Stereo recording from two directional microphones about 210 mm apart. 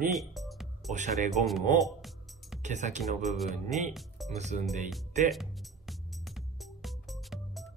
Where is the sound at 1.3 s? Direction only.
Centre (ahead or behind).